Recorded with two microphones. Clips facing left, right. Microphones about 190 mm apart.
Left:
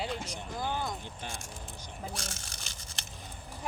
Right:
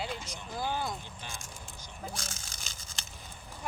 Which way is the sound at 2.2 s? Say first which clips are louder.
Left 2 dB; 65° left (ahead or behind).